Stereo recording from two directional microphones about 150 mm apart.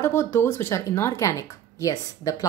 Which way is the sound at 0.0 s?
15° left (ahead or behind).